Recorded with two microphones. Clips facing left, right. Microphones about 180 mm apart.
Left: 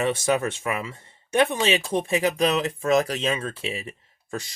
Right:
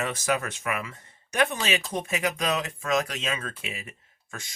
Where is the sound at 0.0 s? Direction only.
30° left (ahead or behind).